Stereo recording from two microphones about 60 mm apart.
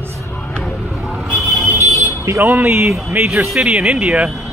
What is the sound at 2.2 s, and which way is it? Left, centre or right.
Speech, right.